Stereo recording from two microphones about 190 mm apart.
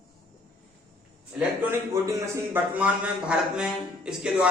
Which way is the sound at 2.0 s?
15° right (ahead or behind).